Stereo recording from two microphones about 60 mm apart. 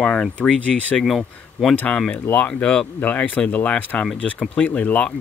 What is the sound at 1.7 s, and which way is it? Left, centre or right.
Speech, left.